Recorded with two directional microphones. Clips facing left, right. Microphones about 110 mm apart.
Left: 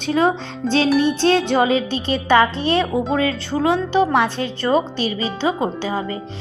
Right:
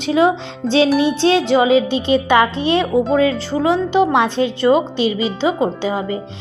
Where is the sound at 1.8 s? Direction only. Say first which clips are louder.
Right 5 dB; 45° left (ahead or behind).